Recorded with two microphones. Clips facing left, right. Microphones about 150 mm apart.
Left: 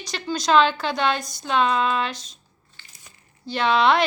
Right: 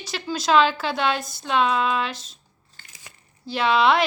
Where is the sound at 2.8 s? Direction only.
45° right (ahead or behind).